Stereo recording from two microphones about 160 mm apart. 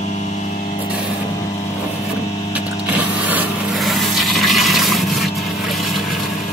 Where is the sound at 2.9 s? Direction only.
10° right (ahead or behind).